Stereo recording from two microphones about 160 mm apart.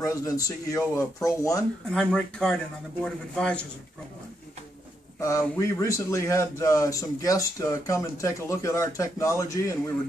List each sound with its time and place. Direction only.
0.0 s a man's voice: 20° left (ahead or behind)
1.9 s a man's voice: 5° left (ahead or behind)
5.2 s a man's voice: 20° left (ahead or behind)